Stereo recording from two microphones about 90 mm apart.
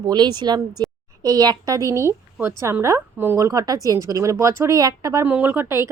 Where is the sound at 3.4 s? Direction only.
40° right (ahead or behind).